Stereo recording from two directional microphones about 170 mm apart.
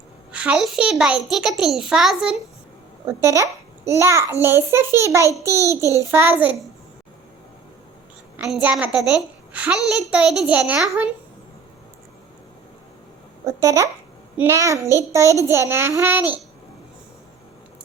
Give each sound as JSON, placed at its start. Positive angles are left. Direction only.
{"t": 0.3, "sound": "a child's voice", "side_deg": -5}
{"t": 3.1, "sound": "a child's voice", "side_deg": -15}
{"t": 8.4, "sound": "a child's voice", "side_deg": -5}
{"t": 13.4, "sound": "a child's voice", "side_deg": -20}